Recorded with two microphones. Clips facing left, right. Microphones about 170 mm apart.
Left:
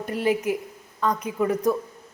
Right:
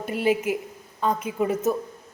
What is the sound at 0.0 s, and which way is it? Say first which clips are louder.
A woman's voice: even; 25° right (ahead or behind).